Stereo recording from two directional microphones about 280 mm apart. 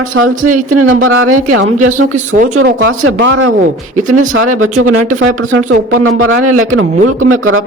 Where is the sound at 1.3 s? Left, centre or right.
Right.